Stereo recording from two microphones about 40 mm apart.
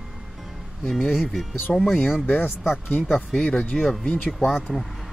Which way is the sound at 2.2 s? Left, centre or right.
Left.